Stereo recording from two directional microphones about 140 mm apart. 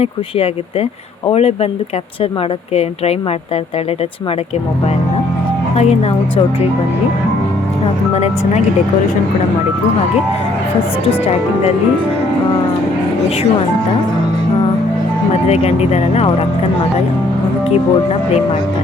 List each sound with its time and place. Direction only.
0.0 s speech: 45° left (ahead or behind)
2.7 s speech: 45° left (ahead or behind)
5.7 s speech: 50° left (ahead or behind)
8.1 s speech: 50° left (ahead or behind)
15.4 s speech: 50° left (ahead or behind)